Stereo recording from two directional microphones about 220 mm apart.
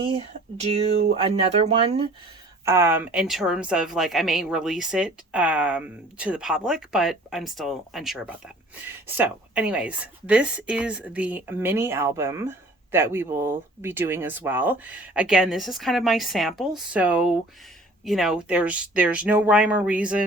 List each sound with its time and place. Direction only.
0.0 s speech: 25° right (ahead or behind)
2.6 s a woman's voice: 10° right (ahead or behind)